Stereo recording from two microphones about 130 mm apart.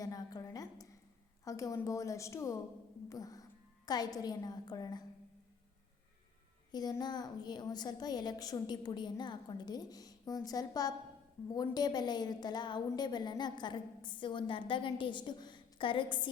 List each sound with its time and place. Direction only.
0.0 s a sound: 30° left (ahead or behind)
1.5 s a woman's voice: 25° left (ahead or behind)
6.7 s a woman's voice: 30° left (ahead or behind)